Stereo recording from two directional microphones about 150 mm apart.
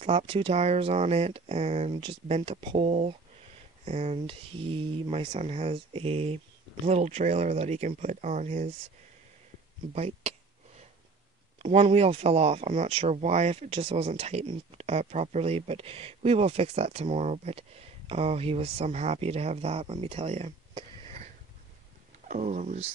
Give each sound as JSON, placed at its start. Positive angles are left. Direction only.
{"t": 0.0, "sound": "speech", "side_deg": -40}
{"t": 9.9, "sound": "speech", "side_deg": -45}
{"t": 11.6, "sound": "speech", "side_deg": -45}
{"t": 20.7, "sound": "sniff", "side_deg": -40}
{"t": 22.3, "sound": "speech", "side_deg": -55}